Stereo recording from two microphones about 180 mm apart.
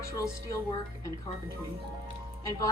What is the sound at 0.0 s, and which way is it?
Speech, 20° left (ahead or behind).